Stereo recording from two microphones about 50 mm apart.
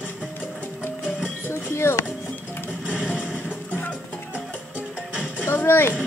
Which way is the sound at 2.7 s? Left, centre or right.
Centre.